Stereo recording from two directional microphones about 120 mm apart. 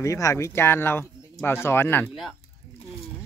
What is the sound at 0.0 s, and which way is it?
Speech, 25° left (ahead or behind).